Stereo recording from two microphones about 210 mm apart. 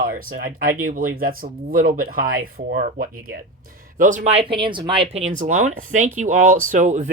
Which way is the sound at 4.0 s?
35° right (ahead or behind).